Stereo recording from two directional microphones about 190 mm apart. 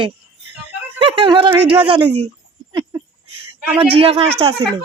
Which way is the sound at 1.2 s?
25° right (ahead or behind).